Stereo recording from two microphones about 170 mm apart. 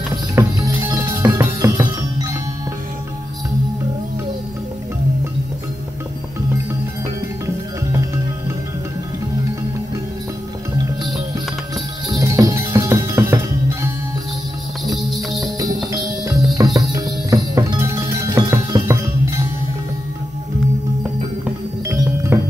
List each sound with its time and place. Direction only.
0.1 s music: 20° right (ahead or behind)
12.1 s music: 20° right (ahead or behind)
15.9 s music: 20° right (ahead or behind)
22.0 s music: 15° right (ahead or behind)